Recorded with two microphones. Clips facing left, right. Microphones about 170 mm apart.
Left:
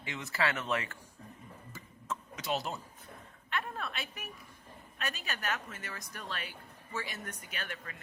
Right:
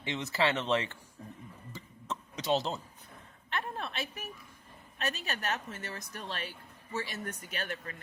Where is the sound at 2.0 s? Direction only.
20° right (ahead or behind).